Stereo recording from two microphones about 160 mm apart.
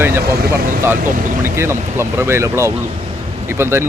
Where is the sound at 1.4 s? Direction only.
15° right (ahead or behind).